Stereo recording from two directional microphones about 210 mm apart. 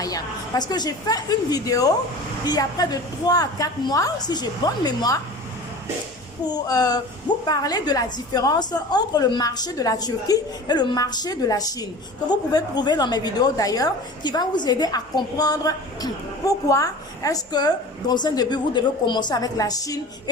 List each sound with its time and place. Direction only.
0.0 s a sound: 15° left (ahead or behind)
0.7 s a woman's voice: 20° left (ahead or behind)
6.4 s a woman's voice: 20° left (ahead or behind)